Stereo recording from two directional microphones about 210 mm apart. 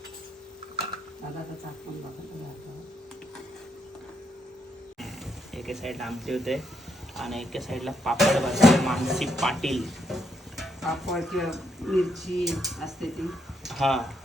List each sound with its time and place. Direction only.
5.5 s speech: centre (ahead or behind)